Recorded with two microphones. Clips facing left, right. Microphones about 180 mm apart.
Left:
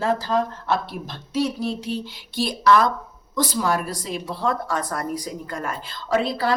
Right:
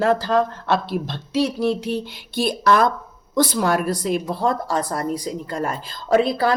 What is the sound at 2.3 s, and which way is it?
Speech, 55° right (ahead or behind).